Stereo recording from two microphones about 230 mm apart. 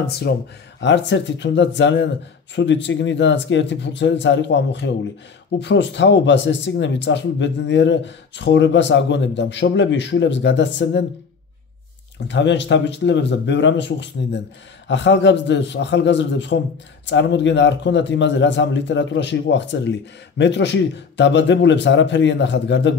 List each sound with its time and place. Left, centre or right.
0.3 s a man's voice: left
12.3 s a man's voice: left